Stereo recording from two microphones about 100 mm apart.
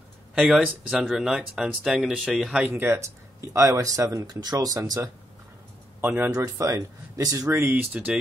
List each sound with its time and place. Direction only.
0.3 s speech: 10° right (ahead or behind)
2.7 s speech: 25° right (ahead or behind)
5.9 s a man's voice: 20° right (ahead or behind)
6.3 s speech: 35° right (ahead or behind)
7.9 s speech: 15° right (ahead or behind)